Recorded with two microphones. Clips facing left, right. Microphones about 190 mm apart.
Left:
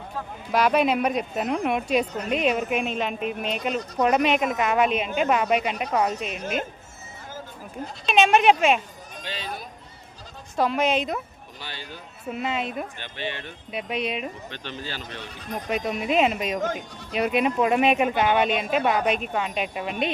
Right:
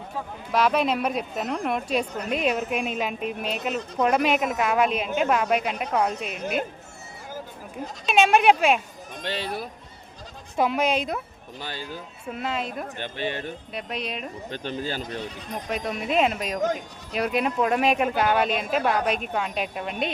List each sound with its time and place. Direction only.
0.5 s speech: centre (ahead or behind)
8.0 s speech: 5° right (ahead or behind)
9.2 s speech: 65° right (ahead or behind)
10.6 s speech: 5° right (ahead or behind)
11.6 s speech: 45° right (ahead or behind)
12.3 s speech: 5° left (ahead or behind)
13.0 s speech: 45° right (ahead or behind)
13.7 s speech: 5° left (ahead or behind)
14.5 s speech: 45° right (ahead or behind)
15.7 s speech: centre (ahead or behind)